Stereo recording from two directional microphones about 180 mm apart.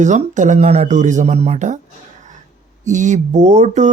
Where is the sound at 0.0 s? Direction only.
40° right (ahead or behind).